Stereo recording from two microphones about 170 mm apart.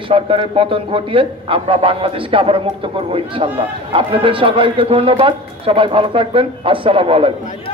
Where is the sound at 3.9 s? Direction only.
30° right (ahead or behind).